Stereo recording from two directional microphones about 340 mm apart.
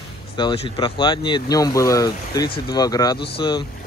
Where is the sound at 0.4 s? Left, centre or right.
Centre.